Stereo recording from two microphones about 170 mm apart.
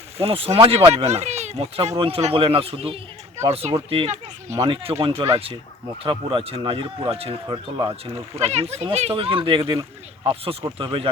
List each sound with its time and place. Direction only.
0.2 s speech: 35° right (ahead or behind)